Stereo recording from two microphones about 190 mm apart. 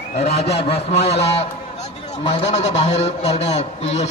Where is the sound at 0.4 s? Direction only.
30° left (ahead or behind).